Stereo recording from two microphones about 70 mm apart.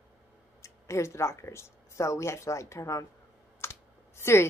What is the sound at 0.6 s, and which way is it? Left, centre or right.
Speech, left.